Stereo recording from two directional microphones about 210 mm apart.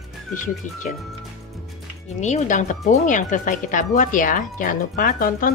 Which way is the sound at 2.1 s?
35° left (ahead or behind).